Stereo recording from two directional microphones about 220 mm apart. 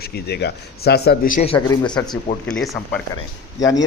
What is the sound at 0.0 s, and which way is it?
Speech, 45° left (ahead or behind).